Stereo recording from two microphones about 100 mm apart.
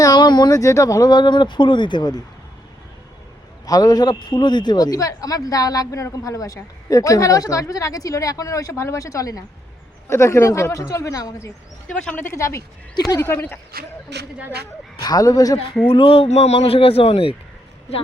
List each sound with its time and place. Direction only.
0.0 s speech: 45° left (ahead or behind)
3.7 s a man's voice: 40° left (ahead or behind); by 13.6 s 20° left (ahead or behind)
15.0 s a man's voice: 40° left (ahead or behind)
15.9 s a man's voice: 65° left (ahead or behind)